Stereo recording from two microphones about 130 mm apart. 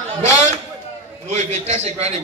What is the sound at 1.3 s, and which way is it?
Speech, 60° right (ahead or behind).